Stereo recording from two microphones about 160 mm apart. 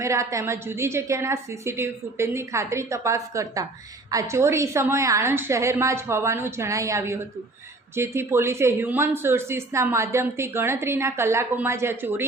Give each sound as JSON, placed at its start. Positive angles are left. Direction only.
{"t": 0.0, "sound": "speech", "side_deg": -20}